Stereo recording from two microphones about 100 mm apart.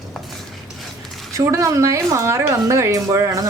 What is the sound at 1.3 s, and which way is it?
Speech, 30° right (ahead or behind).